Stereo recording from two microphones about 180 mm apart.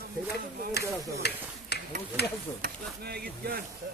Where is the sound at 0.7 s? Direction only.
65° left (ahead or behind).